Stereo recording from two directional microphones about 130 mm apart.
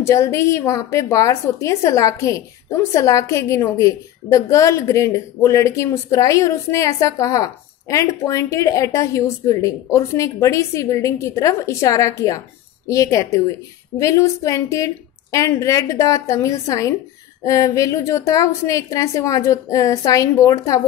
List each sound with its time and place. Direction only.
0.0 s a woman's voice: 25° left (ahead or behind)